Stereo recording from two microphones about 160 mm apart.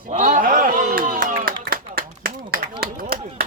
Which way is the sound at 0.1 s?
55° right (ahead or behind).